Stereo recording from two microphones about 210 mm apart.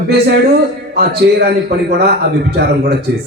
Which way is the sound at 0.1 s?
50° right (ahead or behind).